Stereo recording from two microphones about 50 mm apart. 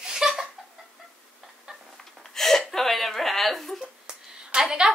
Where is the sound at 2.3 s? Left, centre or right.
Centre.